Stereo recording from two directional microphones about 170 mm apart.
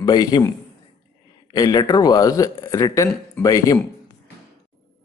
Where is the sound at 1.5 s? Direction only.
25° left (ahead or behind).